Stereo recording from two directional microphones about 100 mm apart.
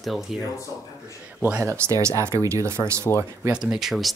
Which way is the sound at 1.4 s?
20° right (ahead or behind).